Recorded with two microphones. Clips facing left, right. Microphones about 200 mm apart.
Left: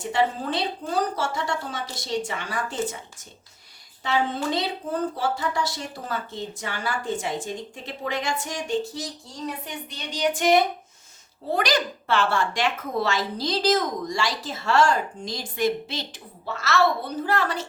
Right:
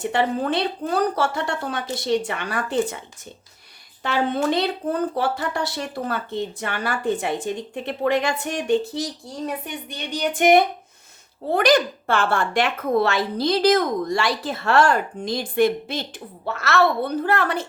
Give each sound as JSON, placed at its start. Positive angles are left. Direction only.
{"t": 0.0, "sound": "speech", "side_deg": -60}
{"t": 4.0, "sound": "speech", "side_deg": -60}
{"t": 9.9, "sound": "speech", "side_deg": -55}